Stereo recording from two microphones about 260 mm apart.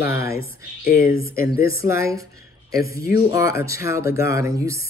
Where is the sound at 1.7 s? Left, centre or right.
Centre.